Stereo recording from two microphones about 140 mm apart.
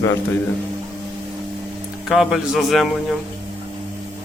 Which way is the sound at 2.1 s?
Centre (ahead or behind).